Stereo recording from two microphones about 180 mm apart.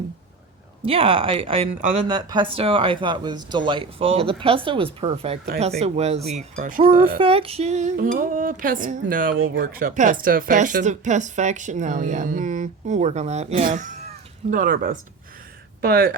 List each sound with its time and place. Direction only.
0.8 s speech: 30° right (ahead or behind)
7.2 s speech: 30° right (ahead or behind); by 16.1 s 55° right (ahead or behind)